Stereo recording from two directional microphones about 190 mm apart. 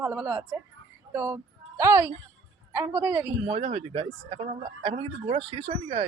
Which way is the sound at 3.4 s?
30° right (ahead or behind).